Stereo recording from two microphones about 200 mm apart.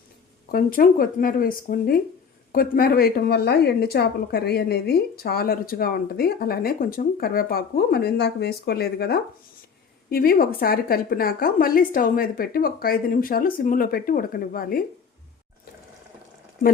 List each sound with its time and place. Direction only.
0.5 s speech: 45° left (ahead or behind)